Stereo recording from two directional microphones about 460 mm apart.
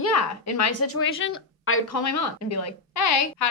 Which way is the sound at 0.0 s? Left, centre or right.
Left.